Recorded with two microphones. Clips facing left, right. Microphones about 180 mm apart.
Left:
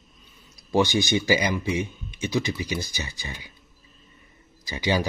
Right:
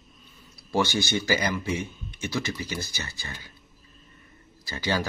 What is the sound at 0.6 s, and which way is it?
Speech, 15° left (ahead or behind).